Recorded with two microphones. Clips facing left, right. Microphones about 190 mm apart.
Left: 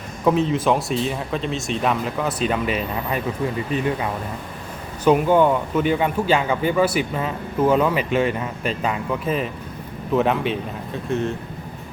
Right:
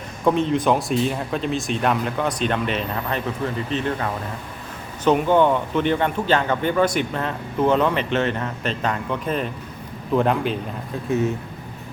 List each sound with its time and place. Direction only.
0.3 s a man's voice: centre (ahead or behind)